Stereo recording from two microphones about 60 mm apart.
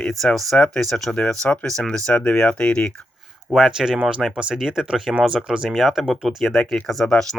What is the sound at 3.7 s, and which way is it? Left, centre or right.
Speech, centre.